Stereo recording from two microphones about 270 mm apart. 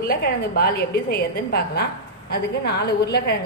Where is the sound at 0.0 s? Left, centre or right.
Left.